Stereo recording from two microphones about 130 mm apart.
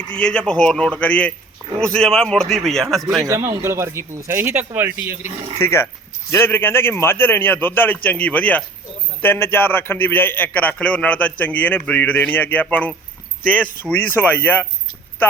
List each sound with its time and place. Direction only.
0.0 s a man's voice: 5° left (ahead or behind)
3.2 s a man's voice: 20° right (ahead or behind)
5.5 s a man's voice: 20° left (ahead or behind)